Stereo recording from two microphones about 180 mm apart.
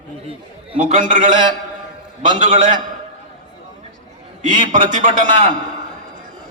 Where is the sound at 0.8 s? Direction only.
45° right (ahead or behind).